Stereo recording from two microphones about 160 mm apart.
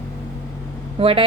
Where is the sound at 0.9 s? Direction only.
35° right (ahead or behind).